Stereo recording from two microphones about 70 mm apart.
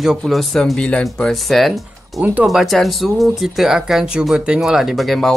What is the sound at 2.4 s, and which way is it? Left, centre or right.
Speech, centre.